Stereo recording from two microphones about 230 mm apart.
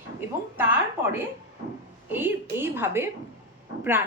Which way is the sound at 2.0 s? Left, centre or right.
Centre.